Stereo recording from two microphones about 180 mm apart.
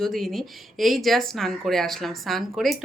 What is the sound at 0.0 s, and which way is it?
Speech, centre (ahead or behind).